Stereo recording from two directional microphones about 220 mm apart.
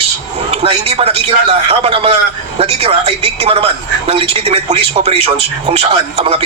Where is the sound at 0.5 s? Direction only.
25° right (ahead or behind).